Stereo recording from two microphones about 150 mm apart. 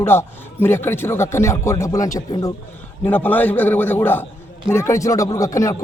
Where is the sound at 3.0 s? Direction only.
10° left (ahead or behind).